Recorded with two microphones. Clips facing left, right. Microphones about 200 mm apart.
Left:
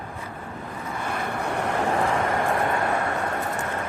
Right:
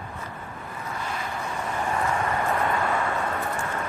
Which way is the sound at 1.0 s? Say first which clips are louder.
Left 5 dB; 60° left (ahead or behind).